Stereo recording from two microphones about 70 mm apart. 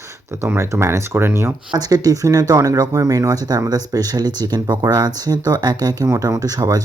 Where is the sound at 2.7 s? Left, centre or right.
Right.